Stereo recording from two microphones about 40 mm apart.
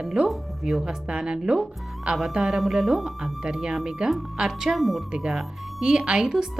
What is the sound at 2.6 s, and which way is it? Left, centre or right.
A woman's voice, centre.